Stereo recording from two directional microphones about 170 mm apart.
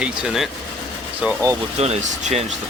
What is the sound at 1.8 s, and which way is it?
Speech, 40° right (ahead or behind).